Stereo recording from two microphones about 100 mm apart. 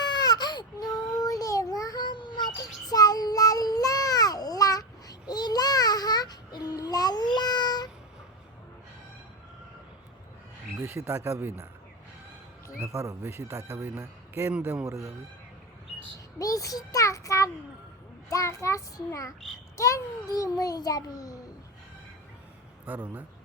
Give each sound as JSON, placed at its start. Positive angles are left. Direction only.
{"t": 0.0, "sound": "baby cry", "side_deg": 45}
{"t": 5.3, "sound": "child singing", "side_deg": 45}
{"t": 10.8, "sound": "speech", "side_deg": -20}
{"t": 12.8, "sound": "a man's voice", "side_deg": -30}
{"t": 16.4, "sound": "child singing", "side_deg": 35}
{"t": 19.7, "sound": "a child's voice", "side_deg": 30}
{"t": 22.9, "sound": "speech", "side_deg": -15}